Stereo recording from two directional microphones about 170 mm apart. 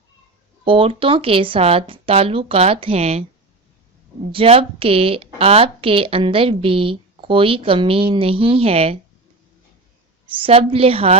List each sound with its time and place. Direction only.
0.6 s a woman's voice: 30° right (ahead or behind)
4.3 s a woman's voice: 35° right (ahead or behind)
10.2 s a woman's voice: 30° right (ahead or behind)